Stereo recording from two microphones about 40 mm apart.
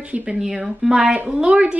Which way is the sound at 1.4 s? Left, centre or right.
Right.